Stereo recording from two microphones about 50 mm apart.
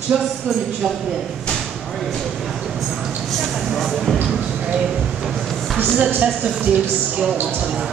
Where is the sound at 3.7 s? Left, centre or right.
Centre.